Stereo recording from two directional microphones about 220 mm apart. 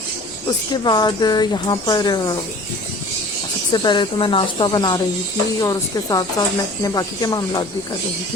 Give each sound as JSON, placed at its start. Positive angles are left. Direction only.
{"t": 0.4, "sound": "speech", "side_deg": 20}
{"t": 3.7, "sound": "speech", "side_deg": 20}